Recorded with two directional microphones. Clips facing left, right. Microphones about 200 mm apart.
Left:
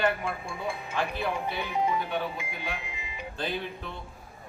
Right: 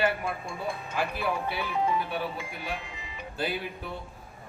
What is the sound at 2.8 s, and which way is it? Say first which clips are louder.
Music: left 1 dB; 10° left (ahead or behind).